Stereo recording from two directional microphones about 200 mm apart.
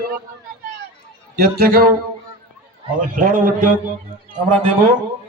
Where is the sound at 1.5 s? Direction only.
50° right (ahead or behind).